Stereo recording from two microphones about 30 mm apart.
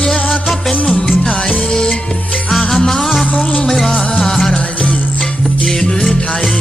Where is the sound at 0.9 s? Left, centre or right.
Centre.